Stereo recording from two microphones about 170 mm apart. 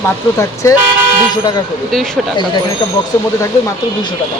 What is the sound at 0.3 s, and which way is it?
Speech, 15° left (ahead or behind).